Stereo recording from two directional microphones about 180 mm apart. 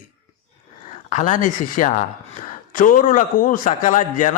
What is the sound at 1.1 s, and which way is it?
Speech, 45° left (ahead or behind).